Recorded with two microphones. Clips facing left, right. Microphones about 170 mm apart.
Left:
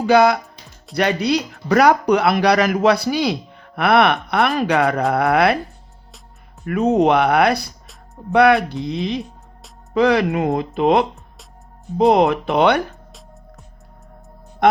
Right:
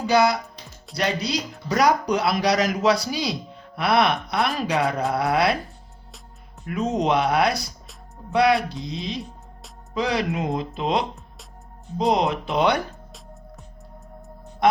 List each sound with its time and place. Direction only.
0.0 s speech: 55° left (ahead or behind)
6.7 s speech: 60° left (ahead or behind)